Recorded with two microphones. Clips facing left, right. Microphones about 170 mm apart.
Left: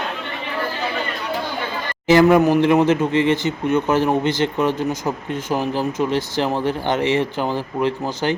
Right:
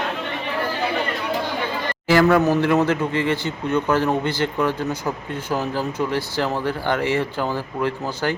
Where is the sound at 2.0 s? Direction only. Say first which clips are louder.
Left 3 dB; 20° left (ahead or behind).